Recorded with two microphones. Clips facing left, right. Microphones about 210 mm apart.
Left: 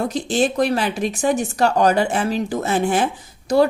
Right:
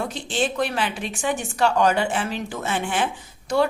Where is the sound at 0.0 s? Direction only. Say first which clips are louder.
Left 6 dB; 40° left (ahead or behind).